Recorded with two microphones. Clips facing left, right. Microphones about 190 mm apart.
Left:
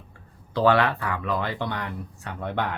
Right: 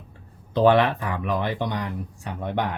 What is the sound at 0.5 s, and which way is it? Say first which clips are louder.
Speech: right 3 dB; 20° right (ahead or behind).